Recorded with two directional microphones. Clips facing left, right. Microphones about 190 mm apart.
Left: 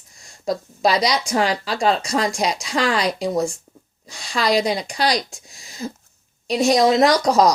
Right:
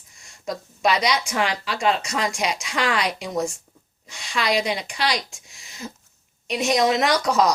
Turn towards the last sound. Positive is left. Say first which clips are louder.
# left 5 dB
turn(degrees=35)  # may be behind; listen again after turning